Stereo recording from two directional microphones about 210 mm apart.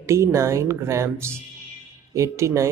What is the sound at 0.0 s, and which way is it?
Speech, 15° right (ahead or behind).